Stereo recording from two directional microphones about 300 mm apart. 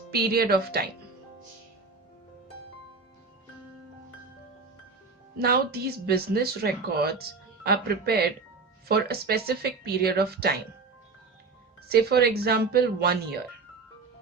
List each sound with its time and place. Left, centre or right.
0.1 s speech: right
5.4 s speech: right
11.9 s speech: right